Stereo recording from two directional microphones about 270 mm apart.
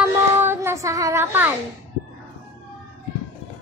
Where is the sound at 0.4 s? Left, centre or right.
Centre.